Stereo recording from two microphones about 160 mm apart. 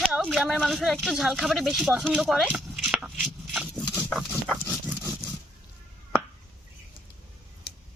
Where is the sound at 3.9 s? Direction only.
5° left (ahead or behind).